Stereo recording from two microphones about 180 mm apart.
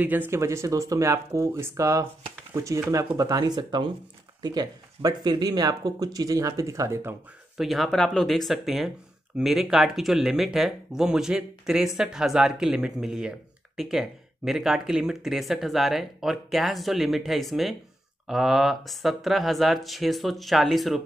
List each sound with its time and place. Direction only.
0.0 s speech: 10° right (ahead or behind)
7.5 s speech: centre (ahead or behind)